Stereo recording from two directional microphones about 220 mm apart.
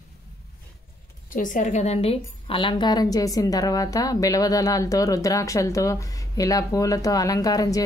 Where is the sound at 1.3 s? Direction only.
35° left (ahead or behind).